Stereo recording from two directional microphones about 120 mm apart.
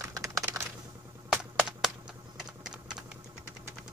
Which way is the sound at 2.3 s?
5° right (ahead or behind).